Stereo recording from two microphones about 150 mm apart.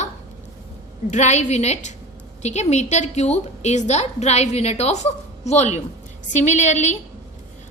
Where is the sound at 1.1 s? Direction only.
50° left (ahead or behind).